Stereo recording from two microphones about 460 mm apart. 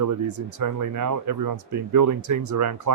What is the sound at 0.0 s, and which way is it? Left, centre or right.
Speech, right.